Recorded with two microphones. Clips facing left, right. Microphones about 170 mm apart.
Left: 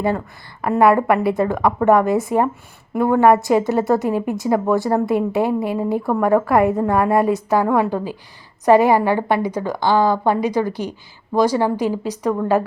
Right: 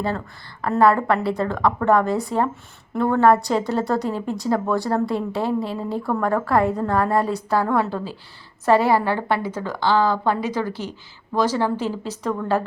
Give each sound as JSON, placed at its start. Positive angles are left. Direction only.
{"t": 0.6, "sound": "a woman's voice", "side_deg": 15}